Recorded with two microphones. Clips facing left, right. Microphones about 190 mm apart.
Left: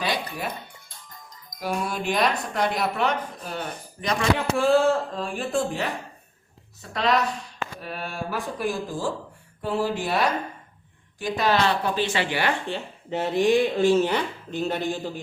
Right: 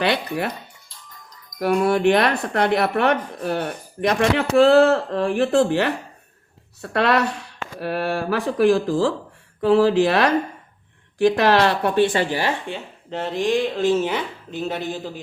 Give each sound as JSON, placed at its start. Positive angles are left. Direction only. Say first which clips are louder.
{"t": 0.0, "sound": "speech", "louder": "right 6 dB", "side_deg": -65}
{"t": 1.5, "sound": "speech", "louder": "right 10 dB", "side_deg": -65}
{"t": 12.1, "sound": "speech", "louder": "right 5 dB", "side_deg": -45}
{"t": 12.7, "sound": "speech", "louder": "left 1 dB", "side_deg": 5}